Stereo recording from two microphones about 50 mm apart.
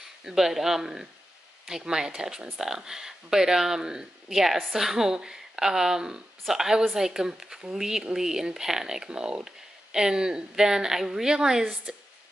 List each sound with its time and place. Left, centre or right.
0.0 s speech: centre